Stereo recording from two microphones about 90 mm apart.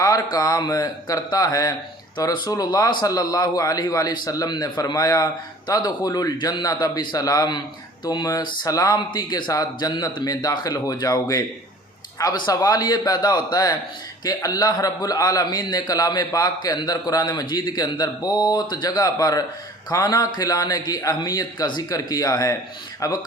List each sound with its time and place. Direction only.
0.0 s a man's voice: 45° left (ahead or behind)
2.1 s a man's voice: 55° left (ahead or behind)